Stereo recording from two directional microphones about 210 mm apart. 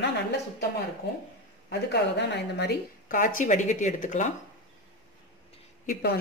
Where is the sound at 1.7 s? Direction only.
55° left (ahead or behind).